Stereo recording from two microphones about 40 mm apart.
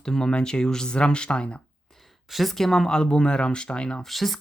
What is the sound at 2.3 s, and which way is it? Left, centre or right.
Speech, centre.